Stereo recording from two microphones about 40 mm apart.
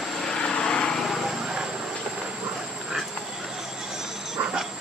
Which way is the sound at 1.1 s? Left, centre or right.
Centre.